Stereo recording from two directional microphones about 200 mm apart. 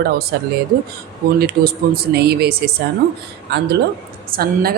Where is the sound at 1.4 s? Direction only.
50° right (ahead or behind).